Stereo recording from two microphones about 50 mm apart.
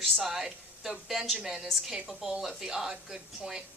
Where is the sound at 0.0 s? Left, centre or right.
Centre.